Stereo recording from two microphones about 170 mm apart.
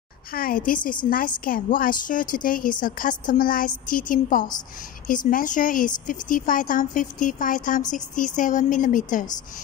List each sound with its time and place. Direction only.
0.3 s a woman's voice: 60° left (ahead or behind)